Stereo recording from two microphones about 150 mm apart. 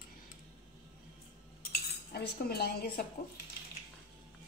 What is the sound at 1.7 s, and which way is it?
Cutlery, 90° left.